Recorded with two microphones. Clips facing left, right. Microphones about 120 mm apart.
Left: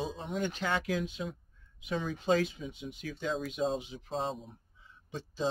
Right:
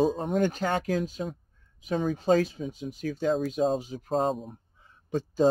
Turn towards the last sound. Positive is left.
turn(degrees=-45)  # may be behind; listen again after turning